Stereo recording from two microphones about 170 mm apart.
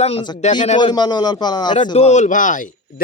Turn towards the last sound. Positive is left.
turn(degrees=50)  # may be behind; listen again after turning